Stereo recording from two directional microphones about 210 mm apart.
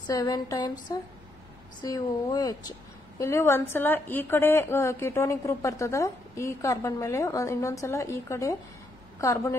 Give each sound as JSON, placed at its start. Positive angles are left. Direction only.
{"t": 0.0, "sound": "a woman's voice", "side_deg": 15}